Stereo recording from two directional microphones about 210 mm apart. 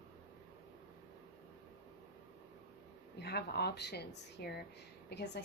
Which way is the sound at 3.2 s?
50° left (ahead or behind).